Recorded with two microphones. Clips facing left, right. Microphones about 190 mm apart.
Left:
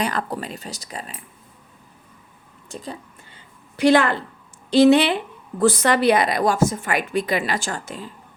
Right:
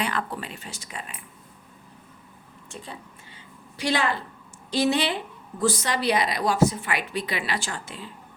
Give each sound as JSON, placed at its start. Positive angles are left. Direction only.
{"t": 0.0, "sound": "speech", "side_deg": 40}
{"t": 2.6, "sound": "speech", "side_deg": 40}
{"t": 3.8, "sound": "a woman's voice", "side_deg": 55}